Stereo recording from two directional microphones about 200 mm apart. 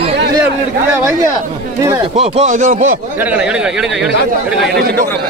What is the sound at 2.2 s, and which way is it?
Speech, 35° right (ahead or behind).